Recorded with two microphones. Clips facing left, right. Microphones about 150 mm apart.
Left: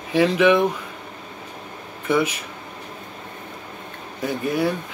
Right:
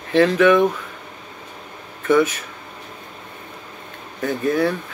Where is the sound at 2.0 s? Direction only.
10° left (ahead or behind).